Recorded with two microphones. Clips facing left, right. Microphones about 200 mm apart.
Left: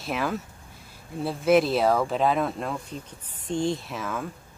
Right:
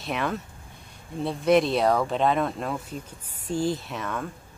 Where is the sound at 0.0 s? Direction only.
Centre (ahead or behind).